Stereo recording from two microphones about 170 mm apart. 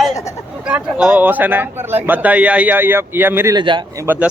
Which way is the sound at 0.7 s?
5° right (ahead or behind).